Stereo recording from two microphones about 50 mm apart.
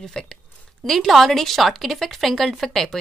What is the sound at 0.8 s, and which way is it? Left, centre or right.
Speech, centre.